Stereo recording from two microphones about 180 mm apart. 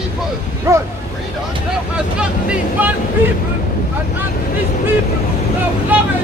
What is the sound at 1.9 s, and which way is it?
Speech, 5° right (ahead or behind).